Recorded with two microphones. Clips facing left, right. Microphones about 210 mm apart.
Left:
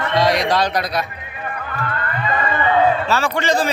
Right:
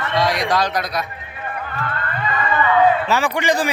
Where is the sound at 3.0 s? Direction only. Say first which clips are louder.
Even; 15° right (ahead or behind).